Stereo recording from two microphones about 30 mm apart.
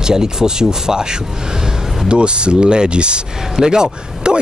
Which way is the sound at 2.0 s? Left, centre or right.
Right.